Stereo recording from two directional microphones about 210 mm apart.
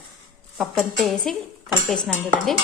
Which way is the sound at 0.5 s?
Centre (ahead or behind).